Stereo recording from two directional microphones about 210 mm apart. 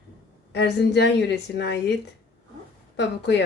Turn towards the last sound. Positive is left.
turn(degrees=55)  # may be behind; listen again after turning